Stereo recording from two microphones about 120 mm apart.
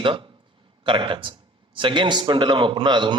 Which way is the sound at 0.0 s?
45° right (ahead or behind).